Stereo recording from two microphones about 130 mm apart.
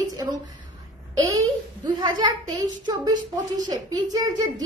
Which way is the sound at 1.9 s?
35° right (ahead or behind).